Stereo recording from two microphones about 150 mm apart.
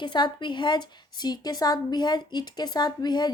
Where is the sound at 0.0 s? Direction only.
30° left (ahead or behind).